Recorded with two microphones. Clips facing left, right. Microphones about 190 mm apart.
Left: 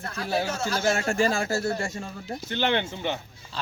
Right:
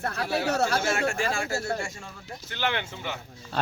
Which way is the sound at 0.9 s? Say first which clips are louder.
Left 3 dB; 35° left (ahead or behind).